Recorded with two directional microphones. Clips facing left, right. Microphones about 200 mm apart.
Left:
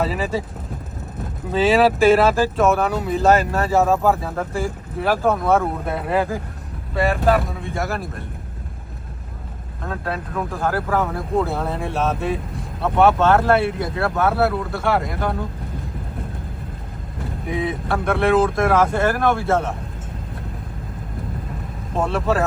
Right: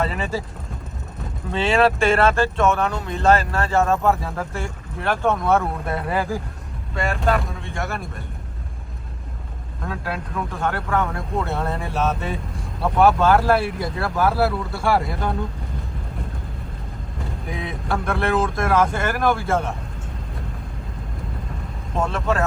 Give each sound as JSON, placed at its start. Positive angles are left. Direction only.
{"t": 0.0, "sound": "speech", "side_deg": 0}
{"t": 1.5, "sound": "speech", "side_deg": 5}
{"t": 10.3, "sound": "speech", "side_deg": 0}
{"t": 17.4, "sound": "speech", "side_deg": 0}
{"t": 21.9, "sound": "speech", "side_deg": 5}